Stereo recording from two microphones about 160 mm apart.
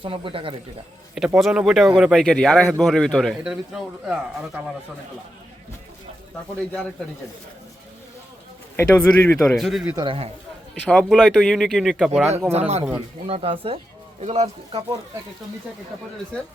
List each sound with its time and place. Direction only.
0.0 s a man's voice: 35° right (ahead or behind)
1.4 s speech: centre (ahead or behind)
8.7 s speech: 10° left (ahead or behind)
9.9 s a man's voice: 30° right (ahead or behind)
10.8 s speech: 5° left (ahead or behind)
12.5 s a man's voice: 45° right (ahead or behind)